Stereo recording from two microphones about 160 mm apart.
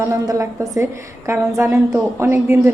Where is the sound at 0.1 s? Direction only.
20° right (ahead or behind).